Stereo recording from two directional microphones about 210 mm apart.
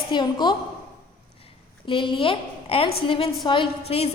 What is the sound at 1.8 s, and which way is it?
A woman's voice, 25° left (ahead or behind).